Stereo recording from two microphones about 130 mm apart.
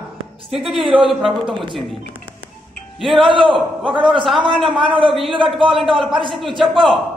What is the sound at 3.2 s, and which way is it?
Speech, 40° right (ahead or behind).